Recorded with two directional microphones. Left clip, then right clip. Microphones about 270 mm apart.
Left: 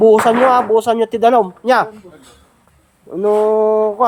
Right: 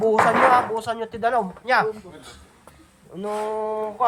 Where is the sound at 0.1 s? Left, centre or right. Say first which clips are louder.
Left 6 dB; left.